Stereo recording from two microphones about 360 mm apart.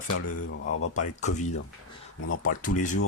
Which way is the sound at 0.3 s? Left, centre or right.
Left.